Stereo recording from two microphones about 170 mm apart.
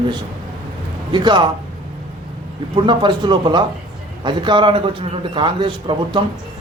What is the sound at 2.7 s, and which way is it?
A man's voice, 25° right (ahead or behind).